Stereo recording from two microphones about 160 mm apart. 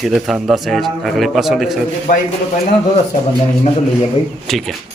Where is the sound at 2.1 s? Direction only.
50° left (ahead or behind).